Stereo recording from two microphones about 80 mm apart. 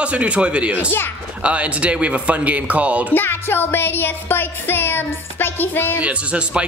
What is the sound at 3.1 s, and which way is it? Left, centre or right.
Music, left.